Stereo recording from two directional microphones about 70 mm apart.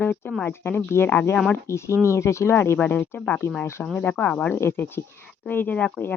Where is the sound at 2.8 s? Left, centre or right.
Left.